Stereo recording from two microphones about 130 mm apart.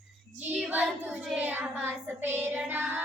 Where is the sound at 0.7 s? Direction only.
15° right (ahead or behind).